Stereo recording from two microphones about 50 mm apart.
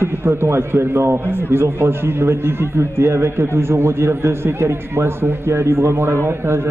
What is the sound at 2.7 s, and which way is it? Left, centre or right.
A man's voice, right.